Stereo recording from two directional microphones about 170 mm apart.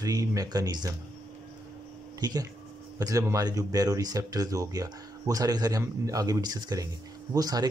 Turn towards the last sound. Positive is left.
turn(degrees=-20)  # may be behind; listen again after turning